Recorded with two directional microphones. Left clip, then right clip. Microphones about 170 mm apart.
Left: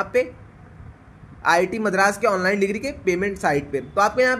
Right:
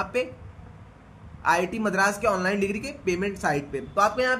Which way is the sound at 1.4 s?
30° left (ahead or behind).